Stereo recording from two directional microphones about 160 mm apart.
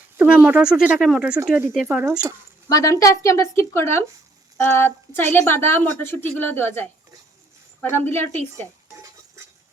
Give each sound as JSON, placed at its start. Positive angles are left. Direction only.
{"t": 0.2, "sound": "speech", "side_deg": -10}
{"t": 2.6, "sound": "a woman's voice", "side_deg": 20}